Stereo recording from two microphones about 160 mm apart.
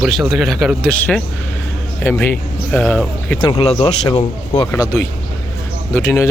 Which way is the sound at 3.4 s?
35° left (ahead or behind).